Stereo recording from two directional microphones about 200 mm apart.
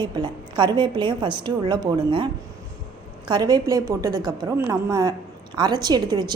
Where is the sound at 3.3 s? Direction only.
20° right (ahead or behind).